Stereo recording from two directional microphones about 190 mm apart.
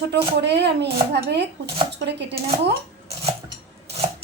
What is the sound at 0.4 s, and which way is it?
Speech, 60° right (ahead or behind).